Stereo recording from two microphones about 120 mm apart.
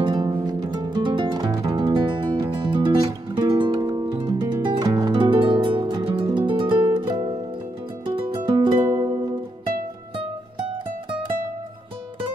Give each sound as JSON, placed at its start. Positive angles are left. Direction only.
{"t": 0.0, "sound": "music", "side_deg": -40}
{"t": 8.5, "sound": "music", "side_deg": -35}